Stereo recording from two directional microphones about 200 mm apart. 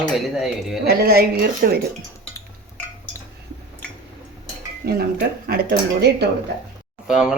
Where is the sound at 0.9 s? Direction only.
50° right (ahead or behind).